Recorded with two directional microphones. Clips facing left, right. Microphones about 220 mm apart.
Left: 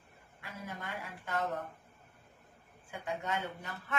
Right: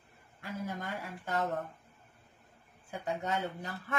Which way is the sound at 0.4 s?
40° right (ahead or behind).